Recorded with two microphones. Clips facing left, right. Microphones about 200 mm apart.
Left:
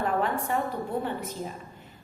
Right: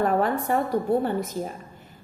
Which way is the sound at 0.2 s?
40° right (ahead or behind).